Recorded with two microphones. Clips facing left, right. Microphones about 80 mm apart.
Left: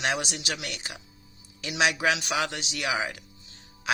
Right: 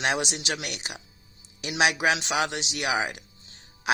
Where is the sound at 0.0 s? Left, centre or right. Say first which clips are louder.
Right 2 dB; right.